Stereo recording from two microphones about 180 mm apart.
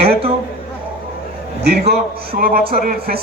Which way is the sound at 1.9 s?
55° right (ahead or behind).